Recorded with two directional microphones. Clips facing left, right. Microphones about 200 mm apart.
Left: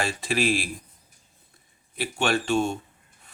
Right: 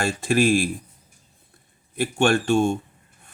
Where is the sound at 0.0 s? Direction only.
50° right (ahead or behind).